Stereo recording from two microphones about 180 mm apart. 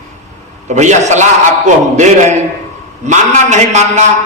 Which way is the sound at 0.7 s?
40° right (ahead or behind).